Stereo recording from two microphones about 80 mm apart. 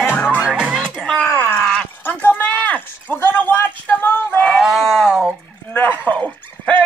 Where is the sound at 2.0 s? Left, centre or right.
Left.